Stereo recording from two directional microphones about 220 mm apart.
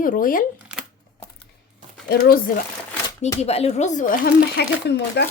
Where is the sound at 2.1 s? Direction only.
45° left (ahead or behind).